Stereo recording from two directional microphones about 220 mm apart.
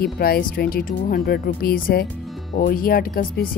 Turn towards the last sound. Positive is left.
turn(degrees=40)  # may be behind; listen again after turning